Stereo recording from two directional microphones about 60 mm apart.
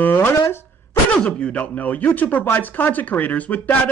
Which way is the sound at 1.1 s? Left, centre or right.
Centre.